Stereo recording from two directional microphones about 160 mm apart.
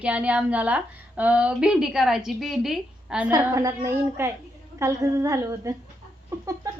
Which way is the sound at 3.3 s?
20° right (ahead or behind).